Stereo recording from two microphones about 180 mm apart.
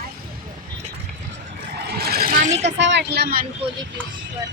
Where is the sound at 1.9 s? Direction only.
60° right (ahead or behind); by 2.7 s 40° right (ahead or behind).